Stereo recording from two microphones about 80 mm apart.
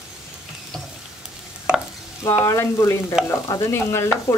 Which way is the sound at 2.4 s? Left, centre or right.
Left.